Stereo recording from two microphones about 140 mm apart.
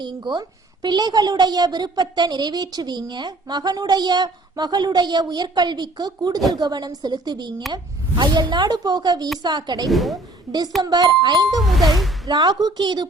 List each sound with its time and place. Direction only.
0.0 s a woman's voice: 30° right (ahead or behind)
9.9 s ding: centre (ahead or behind)
10.8 s a woman's voice: 30° right (ahead or behind)
11.6 s ding: centre (ahead or behind)
12.3 s a woman's voice: 30° right (ahead or behind)